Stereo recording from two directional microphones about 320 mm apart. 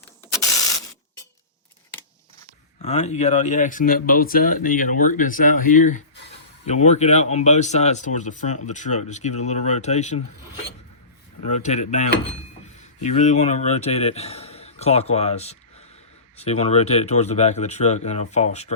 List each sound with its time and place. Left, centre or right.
2.8 s speech: left
11.4 s a man's voice: left